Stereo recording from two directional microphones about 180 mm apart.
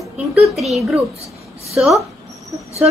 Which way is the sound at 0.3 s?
Centre (ahead or behind).